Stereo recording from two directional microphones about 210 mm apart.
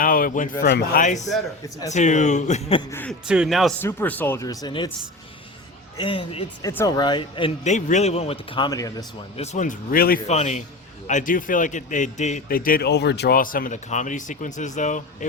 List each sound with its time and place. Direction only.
0.0 s speech: 40° left (ahead or behind)
2.9 s speech: 10° left (ahead or behind)
3.2 s a man's voice: 5° right (ahead or behind); by 4.9 s 20° left (ahead or behind)
6.0 s speech: 25° left (ahead or behind)
9.4 s speech: 35° left (ahead or behind)
10.2 s speech: 30° left (ahead or behind)